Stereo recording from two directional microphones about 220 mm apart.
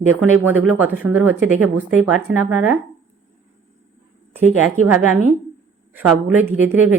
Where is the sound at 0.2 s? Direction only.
10° right (ahead or behind).